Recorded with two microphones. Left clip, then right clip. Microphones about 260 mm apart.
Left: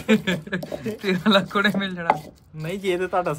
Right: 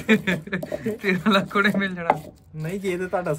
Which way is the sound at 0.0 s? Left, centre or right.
Centre.